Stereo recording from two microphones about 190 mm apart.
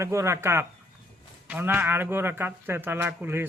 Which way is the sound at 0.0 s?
15° right (ahead or behind).